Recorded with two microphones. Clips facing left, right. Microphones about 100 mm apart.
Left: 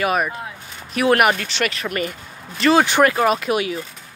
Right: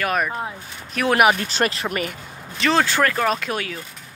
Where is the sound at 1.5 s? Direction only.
35° right (ahead or behind).